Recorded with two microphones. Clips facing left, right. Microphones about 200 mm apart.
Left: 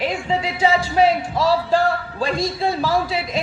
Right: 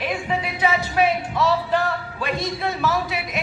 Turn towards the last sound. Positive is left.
turn(degrees=30)  # may be behind; listen again after turning